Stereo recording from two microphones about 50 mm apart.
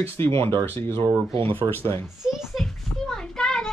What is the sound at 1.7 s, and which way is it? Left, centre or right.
Speech, left.